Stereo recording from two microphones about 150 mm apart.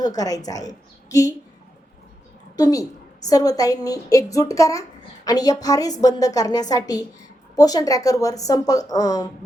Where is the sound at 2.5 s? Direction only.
25° left (ahead or behind).